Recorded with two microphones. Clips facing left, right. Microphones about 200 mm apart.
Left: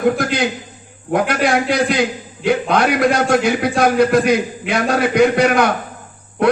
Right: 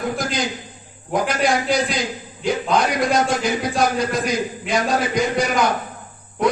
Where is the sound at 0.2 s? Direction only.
60° left (ahead or behind).